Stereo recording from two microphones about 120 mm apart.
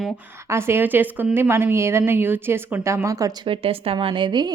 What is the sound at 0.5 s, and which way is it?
A woman's voice, 20° right (ahead or behind).